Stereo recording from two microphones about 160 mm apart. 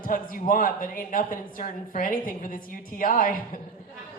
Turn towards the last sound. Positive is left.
turn(degrees=60)  # may be behind; listen again after turning